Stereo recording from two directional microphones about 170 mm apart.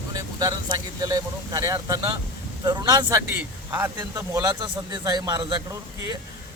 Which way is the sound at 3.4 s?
10° right (ahead or behind).